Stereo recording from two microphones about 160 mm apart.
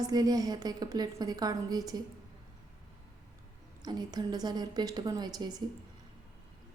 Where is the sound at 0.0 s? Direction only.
25° right (ahead or behind).